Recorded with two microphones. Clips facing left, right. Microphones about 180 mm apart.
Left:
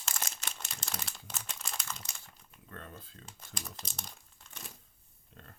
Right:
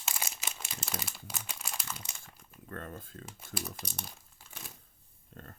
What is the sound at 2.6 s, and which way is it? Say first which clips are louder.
Speech: right 6 dB; 50° right (ahead or behind).